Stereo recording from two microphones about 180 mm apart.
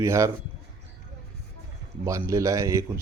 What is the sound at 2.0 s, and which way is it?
Speech, 15° right (ahead or behind).